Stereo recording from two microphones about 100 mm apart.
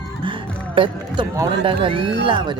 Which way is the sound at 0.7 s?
60° right (ahead or behind).